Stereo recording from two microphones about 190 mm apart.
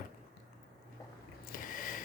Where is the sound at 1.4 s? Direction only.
45° left (ahead or behind).